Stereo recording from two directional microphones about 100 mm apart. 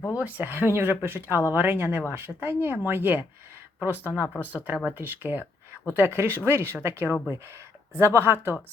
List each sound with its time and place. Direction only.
0.2 s speech: 15° right (ahead or behind)